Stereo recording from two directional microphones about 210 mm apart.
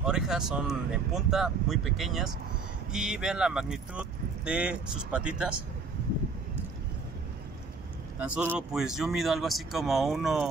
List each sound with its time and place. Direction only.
0.0 s speech: 5° right (ahead or behind)
8.2 s speech: 10° right (ahead or behind)